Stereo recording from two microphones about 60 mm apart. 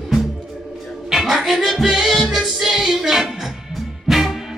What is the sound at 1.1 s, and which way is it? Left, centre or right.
Music, centre.